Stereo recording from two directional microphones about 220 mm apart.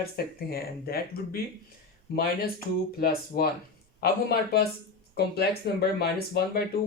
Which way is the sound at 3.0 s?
45° left (ahead or behind).